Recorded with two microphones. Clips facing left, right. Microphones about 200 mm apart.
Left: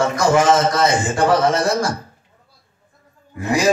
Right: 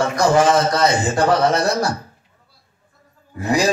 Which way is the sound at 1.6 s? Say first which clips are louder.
Even; 40° right (ahead or behind).